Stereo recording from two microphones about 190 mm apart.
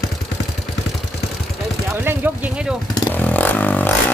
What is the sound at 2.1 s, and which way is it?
Speech, 10° right (ahead or behind).